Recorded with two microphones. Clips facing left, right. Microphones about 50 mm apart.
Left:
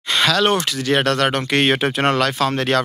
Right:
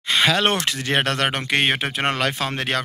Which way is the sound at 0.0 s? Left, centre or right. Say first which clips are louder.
Left 1 dB; centre.